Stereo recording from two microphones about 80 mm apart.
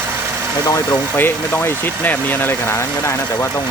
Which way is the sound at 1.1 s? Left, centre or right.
Left.